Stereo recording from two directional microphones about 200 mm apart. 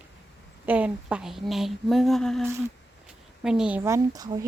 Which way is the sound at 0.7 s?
5° right (ahead or behind).